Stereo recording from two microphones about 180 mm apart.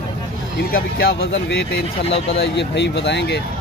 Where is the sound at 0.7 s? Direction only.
60° left (ahead or behind).